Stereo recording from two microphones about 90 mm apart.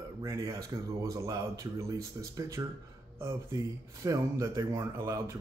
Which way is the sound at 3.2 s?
30° right (ahead or behind).